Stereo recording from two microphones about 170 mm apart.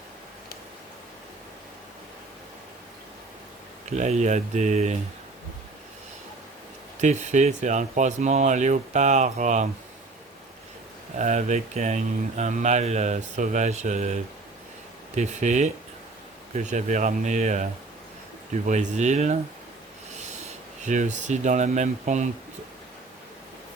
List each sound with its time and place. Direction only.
3.8 s speech: 45° right (ahead or behind)
7.0 s speech: 45° right (ahead or behind)
11.2 s speech: 45° right (ahead or behind)